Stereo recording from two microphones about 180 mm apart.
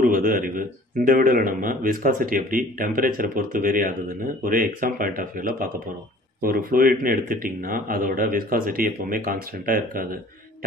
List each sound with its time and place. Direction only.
0.0 s a man's voice: 50° right (ahead or behind)